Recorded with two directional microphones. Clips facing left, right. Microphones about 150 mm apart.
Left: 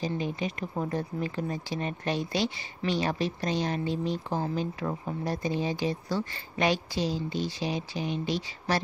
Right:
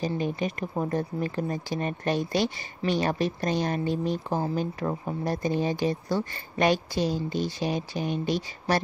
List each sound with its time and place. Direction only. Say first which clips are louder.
0.0 s speech: right 3 dB; 50° right (ahead or behind)